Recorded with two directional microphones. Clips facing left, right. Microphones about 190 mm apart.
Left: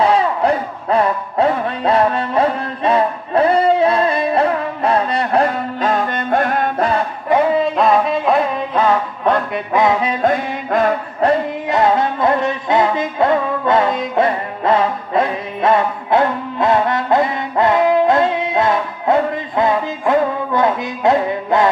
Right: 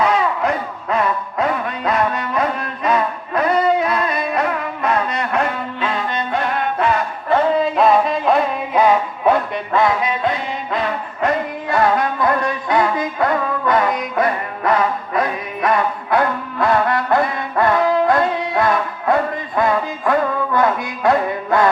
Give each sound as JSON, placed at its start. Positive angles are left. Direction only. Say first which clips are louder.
{"t": 0.0, "sound": "music", "louder": "left 3 dB", "side_deg": 30}
{"t": 7.5, "sound": "music", "louder": "even", "side_deg": 0}
{"t": 8.7, "sound": "music", "louder": "right 3 dB", "side_deg": -10}
{"t": 10.0, "sound": "music", "louder": "left 4 dB", "side_deg": 40}
{"t": 11.2, "sound": "music", "louder": "left 4 dB", "side_deg": 35}
{"t": 11.7, "sound": "music", "louder": "left 2 dB", "side_deg": 25}